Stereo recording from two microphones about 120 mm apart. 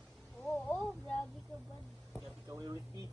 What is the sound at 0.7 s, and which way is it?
Speech, 5° left (ahead or behind).